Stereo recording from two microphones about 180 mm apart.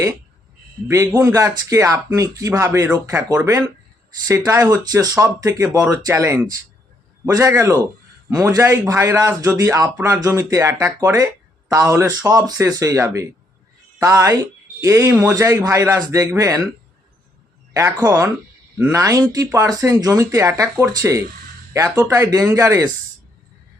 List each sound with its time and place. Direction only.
0.9 s speech: 15° right (ahead or behind)
4.3 s speech: 15° right (ahead or behind)
17.7 s speech: 15° right (ahead or behind)